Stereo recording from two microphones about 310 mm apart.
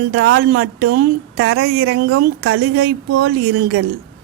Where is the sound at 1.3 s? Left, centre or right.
Right.